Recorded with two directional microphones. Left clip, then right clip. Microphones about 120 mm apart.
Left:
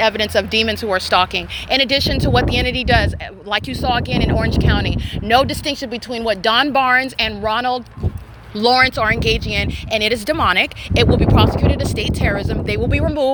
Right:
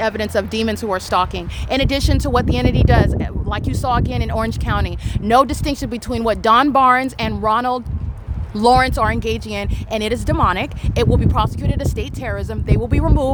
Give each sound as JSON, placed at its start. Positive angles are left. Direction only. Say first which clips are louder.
{"t": 0.0, "sound": "speech", "louder": "left 3 dB", "side_deg": -20}
{"t": 1.7, "sound": "speech", "louder": "left 3 dB", "side_deg": -40}
{"t": 2.4, "sound": "speech", "louder": "left 2 dB", "side_deg": -30}
{"t": 5.7, "sound": "speech", "louder": "even", "side_deg": -60}
{"t": 6.5, "sound": "speech", "louder": "right 3 dB", "side_deg": -35}
{"t": 9.0, "sound": "speech", "louder": "left 4 dB", "side_deg": -25}
{"t": 11.9, "sound": "speech", "louder": "left 5 dB", "side_deg": -25}
{"t": 12.9, "sound": "speech", "louder": "left 2 dB", "side_deg": -35}